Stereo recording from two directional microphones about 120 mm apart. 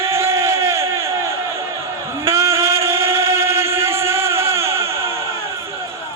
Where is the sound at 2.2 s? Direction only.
20° right (ahead or behind).